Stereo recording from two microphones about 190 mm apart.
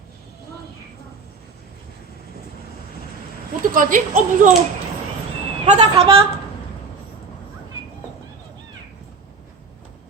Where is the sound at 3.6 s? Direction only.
45° right (ahead or behind).